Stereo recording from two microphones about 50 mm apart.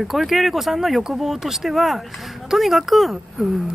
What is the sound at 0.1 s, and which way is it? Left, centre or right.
Speech, centre.